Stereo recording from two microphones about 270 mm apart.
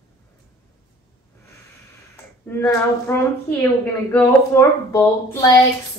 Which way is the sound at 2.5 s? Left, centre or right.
Centre.